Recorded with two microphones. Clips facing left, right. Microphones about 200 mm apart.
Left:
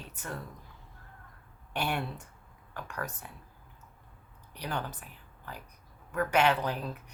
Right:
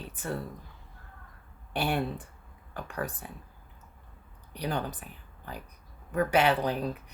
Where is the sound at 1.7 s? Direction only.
35° right (ahead or behind).